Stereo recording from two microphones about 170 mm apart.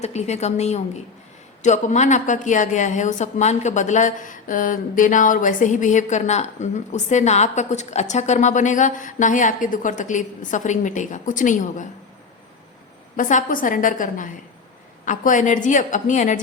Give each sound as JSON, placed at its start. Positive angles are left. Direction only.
{"t": 0.0, "sound": "a woman's voice", "side_deg": 40}
{"t": 13.1, "sound": "a woman's voice", "side_deg": 50}